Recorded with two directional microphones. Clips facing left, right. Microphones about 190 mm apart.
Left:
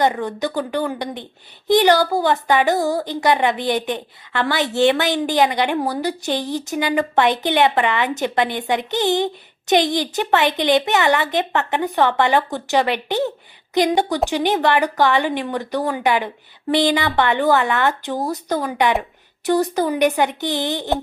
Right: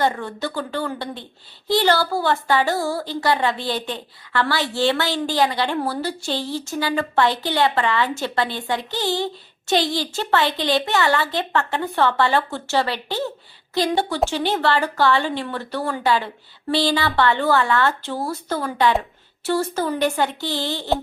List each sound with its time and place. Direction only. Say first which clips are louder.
0.0 s a woman's voice: left 3 dB; 15° left (ahead or behind)